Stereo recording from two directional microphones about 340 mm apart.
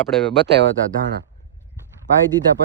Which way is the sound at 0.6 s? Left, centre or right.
Right.